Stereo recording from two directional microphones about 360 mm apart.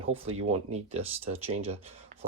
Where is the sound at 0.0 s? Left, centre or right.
Centre.